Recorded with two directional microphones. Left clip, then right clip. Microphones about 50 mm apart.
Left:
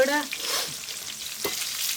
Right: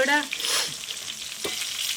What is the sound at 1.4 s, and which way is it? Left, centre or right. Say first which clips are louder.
Stir: right 1 dB; centre.